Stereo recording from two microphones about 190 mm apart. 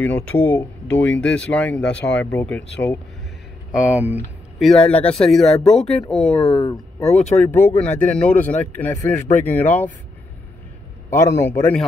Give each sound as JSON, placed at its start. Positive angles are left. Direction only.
{"t": 0.0, "sound": "speech", "side_deg": 10}
{"t": 3.7, "sound": "speech", "side_deg": -5}
{"t": 6.3, "sound": "speech", "side_deg": 30}
{"t": 7.3, "sound": "speech", "side_deg": 10}
{"t": 11.1, "sound": "speech", "side_deg": 15}